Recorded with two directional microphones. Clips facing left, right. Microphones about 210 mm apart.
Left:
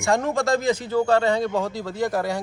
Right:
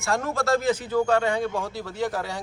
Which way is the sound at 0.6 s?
10° right (ahead or behind).